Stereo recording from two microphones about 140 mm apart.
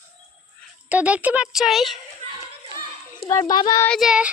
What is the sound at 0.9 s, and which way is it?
Speech, 10° right (ahead or behind).